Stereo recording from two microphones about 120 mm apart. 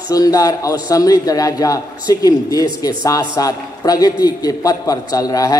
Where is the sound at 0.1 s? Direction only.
30° left (ahead or behind).